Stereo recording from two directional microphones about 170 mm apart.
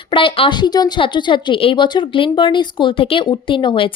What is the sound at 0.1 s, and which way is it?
A woman's voice, 30° left (ahead or behind).